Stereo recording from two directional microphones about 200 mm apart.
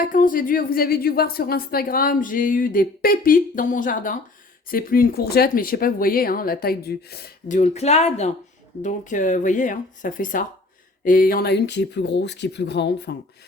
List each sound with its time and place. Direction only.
0.0 s a woman's voice: 40° left (ahead or behind)
7.5 s speech: 35° left (ahead or behind); by 13.1 s 60° left (ahead or behind)